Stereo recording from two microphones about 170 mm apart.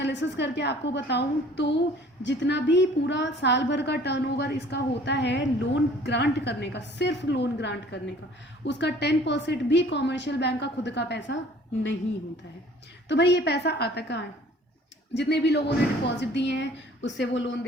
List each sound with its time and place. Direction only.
0.0 s a woman's voice: 90° left
13.1 s a woman's voice: 80° left